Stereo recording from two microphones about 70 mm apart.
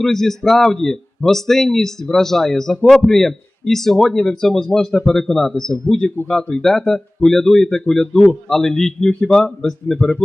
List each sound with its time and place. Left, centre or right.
0.0 s speech: centre
10.0 s speech: left